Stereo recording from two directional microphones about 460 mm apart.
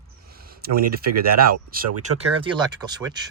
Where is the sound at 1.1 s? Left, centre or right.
Right.